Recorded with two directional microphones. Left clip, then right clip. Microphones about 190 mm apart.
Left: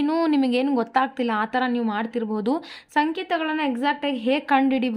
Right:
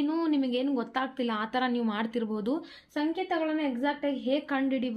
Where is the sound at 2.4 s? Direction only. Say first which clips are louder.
Left 7 dB; 45° left (ahead or behind).